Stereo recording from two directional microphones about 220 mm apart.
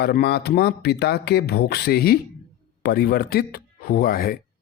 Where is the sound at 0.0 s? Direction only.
45° left (ahead or behind).